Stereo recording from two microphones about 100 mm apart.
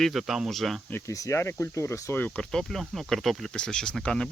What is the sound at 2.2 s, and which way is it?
Speech, 10° left (ahead or behind).